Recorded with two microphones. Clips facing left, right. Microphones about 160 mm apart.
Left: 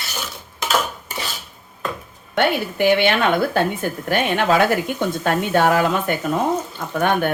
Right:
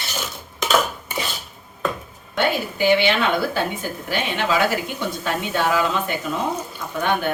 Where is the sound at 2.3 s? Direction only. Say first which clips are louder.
Left 3 dB; 60° left (ahead or behind).